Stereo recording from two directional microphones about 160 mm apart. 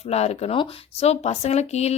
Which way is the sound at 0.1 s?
40° left (ahead or behind).